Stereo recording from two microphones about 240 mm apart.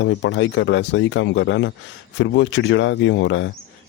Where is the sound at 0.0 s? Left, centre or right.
Left.